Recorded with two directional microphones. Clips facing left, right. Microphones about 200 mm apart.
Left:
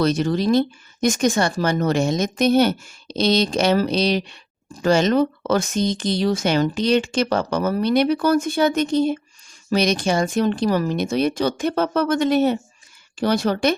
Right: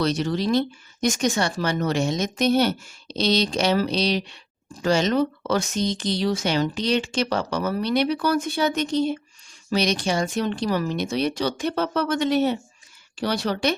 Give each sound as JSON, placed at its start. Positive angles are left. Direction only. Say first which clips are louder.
{"t": 0.0, "sound": "speech", "louder": "left 4 dB", "side_deg": 50}